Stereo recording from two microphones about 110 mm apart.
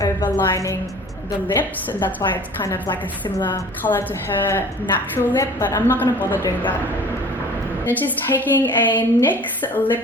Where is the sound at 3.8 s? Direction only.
20° left (ahead or behind).